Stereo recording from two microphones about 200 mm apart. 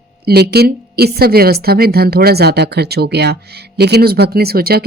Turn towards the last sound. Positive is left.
turn(degrees=-50)  # may be behind; listen again after turning